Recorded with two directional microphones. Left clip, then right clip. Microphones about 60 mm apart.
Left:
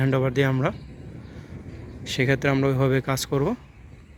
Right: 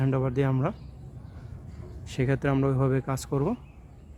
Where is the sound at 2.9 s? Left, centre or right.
Centre.